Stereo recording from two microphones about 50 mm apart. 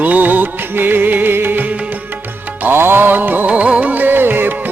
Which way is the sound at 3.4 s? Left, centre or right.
Right.